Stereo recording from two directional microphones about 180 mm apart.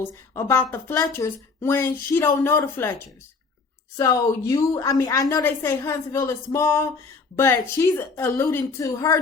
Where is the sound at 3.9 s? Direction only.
20° left (ahead or behind).